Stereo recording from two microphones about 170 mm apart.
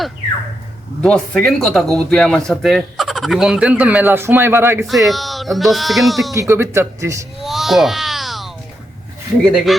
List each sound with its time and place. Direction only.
1.0 s speech: 5° left (ahead or behind); by 4.9 s 15° right (ahead or behind)
4.9 s speech: centre (ahead or behind)
6.3 s speech: 15° right (ahead or behind)
7.4 s baby cry: centre (ahead or behind)
9.7 s speech: centre (ahead or behind)